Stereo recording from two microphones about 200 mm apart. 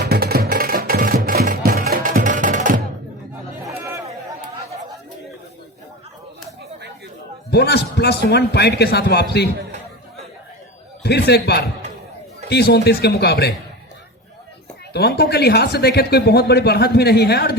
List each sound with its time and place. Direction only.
0.0 s music: 50° right (ahead or behind)
7.5 s a man's voice: 55° left (ahead or behind)
11.0 s a man's voice: 55° left (ahead or behind)
14.9 s speech: 55° left (ahead or behind)